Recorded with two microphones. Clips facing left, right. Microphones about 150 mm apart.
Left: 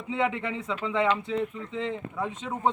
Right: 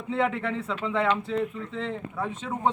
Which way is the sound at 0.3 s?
15° left (ahead or behind).